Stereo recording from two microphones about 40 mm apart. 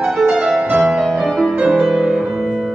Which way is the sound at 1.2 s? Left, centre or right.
Centre.